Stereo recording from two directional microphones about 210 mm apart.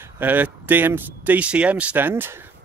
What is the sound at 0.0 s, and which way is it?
Speech, 10° right (ahead or behind).